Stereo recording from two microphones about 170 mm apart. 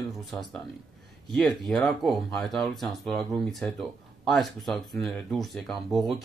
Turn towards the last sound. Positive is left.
turn(degrees=0)  # may be behind; listen again after turning